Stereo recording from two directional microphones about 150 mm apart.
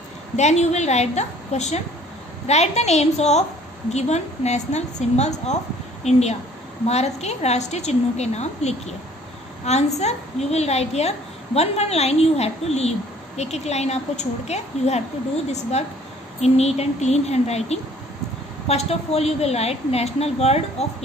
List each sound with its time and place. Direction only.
0.4 s a woman's voice: 50° left (ahead or behind)
16.3 s a woman's voice: 45° left (ahead or behind)